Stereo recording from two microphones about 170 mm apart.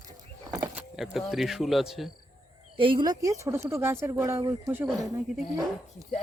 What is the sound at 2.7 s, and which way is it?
Speech, 30° right (ahead or behind).